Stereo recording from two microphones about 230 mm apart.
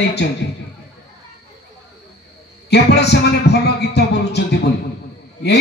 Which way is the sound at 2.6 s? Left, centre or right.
Left.